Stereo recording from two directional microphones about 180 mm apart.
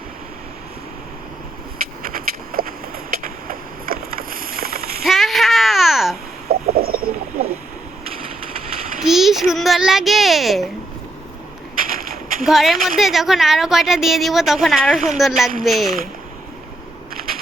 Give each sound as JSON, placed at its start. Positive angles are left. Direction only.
{"t": 2.0, "sound": "vehicle", "side_deg": -55}
{"t": 5.0, "sound": "babbling", "side_deg": 0}
{"t": 6.5, "sound": "a sound", "side_deg": -60}
{"t": 9.0, "sound": "a sound", "side_deg": 0}
{"t": 11.8, "sound": "bird", "side_deg": -50}
{"t": 12.5, "sound": "a woman's voice", "side_deg": 0}